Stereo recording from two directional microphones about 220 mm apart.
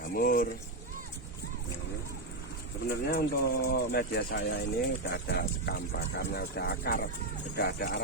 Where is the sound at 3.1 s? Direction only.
45° left (ahead or behind).